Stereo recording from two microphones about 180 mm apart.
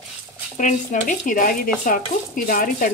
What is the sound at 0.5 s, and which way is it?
A woman's voice, 45° left (ahead or behind).